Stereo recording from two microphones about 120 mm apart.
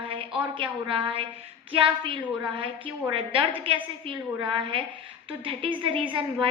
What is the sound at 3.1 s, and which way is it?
A woman's voice, 45° right (ahead or behind).